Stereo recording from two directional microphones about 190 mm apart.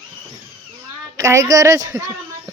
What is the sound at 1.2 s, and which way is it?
Speech, 15° right (ahead or behind).